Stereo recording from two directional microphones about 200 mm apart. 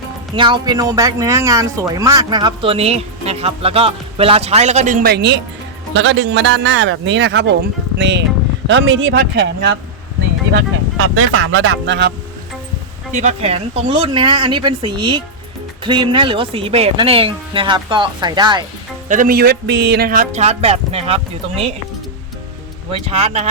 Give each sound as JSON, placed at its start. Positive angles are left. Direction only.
{"t": 0.3, "sound": "speech", "side_deg": -25}
{"t": 5.9, "sound": "speech", "side_deg": -70}
{"t": 8.6, "sound": "speech", "side_deg": -70}
{"t": 10.9, "sound": "speech", "side_deg": -90}
{"t": 13.1, "sound": "speech", "side_deg": -35}
{"t": 19.0, "sound": "speech", "side_deg": -40}
{"t": 22.9, "sound": "speech", "side_deg": -30}